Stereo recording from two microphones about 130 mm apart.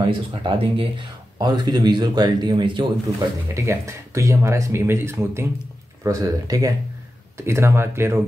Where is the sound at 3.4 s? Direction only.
20° right (ahead or behind).